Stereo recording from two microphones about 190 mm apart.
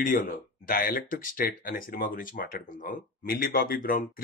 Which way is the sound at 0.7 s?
50° left (ahead or behind).